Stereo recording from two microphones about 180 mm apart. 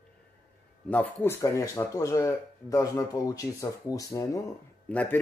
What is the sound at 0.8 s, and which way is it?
Speech, 10° left (ahead or behind).